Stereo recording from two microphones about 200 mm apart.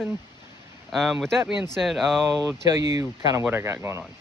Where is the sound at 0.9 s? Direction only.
Centre (ahead or behind).